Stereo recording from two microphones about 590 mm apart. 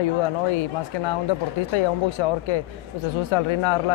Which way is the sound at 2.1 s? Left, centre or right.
Left.